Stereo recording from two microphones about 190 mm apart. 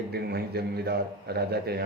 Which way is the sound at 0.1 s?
55° right (ahead or behind).